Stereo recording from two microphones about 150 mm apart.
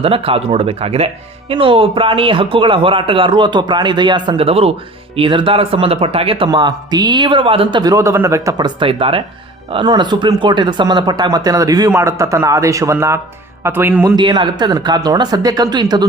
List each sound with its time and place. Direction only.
0.0 s a man's voice: 40° right (ahead or behind); by 14.2 s 15° right (ahead or behind)
14.2 s speech: 30° right (ahead or behind)